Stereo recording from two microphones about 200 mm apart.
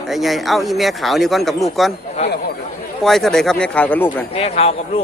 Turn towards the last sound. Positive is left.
turn(degrees=30)  # may be behind; listen again after turning